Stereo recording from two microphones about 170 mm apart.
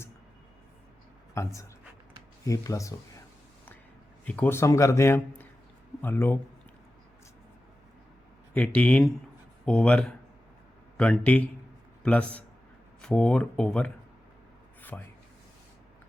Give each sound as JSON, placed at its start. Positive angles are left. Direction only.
{"t": 1.3, "sound": "speech", "side_deg": 15}
{"t": 4.3, "sound": "a man's voice", "side_deg": 10}
{"t": 8.5, "sound": "a man's voice", "side_deg": 10}
{"t": 14.8, "sound": "a sound", "side_deg": 10}